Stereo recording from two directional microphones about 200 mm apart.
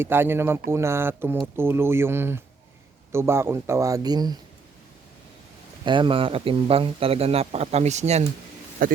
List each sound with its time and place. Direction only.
0.0 s speech: 10° right (ahead or behind)
5.8 s a man's voice: 25° right (ahead or behind)
8.8 s speech: 45° right (ahead or behind)